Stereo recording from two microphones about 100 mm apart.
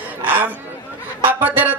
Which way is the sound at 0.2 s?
20° right (ahead or behind).